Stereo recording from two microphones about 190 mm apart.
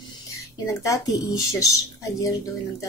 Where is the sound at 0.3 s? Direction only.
15° left (ahead or behind).